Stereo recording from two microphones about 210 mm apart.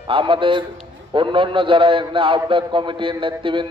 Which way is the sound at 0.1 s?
25° right (ahead or behind).